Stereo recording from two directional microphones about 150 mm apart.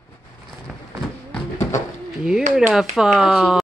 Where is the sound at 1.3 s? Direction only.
15° left (ahead or behind).